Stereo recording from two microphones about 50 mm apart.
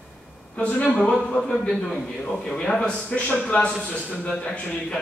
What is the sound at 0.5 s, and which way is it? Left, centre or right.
Speech, left.